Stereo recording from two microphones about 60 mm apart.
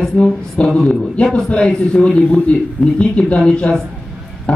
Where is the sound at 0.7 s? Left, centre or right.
Centre.